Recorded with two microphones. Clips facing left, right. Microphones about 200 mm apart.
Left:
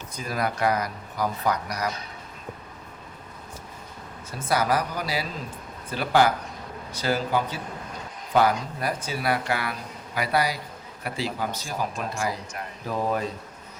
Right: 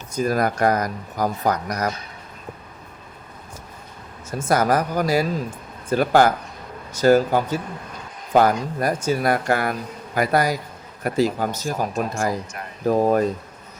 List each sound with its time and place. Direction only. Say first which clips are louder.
0.1 s speech: right 8 dB; 45° right (ahead or behind)
4.3 s speech: right 5 dB; 45° right (ahead or behind)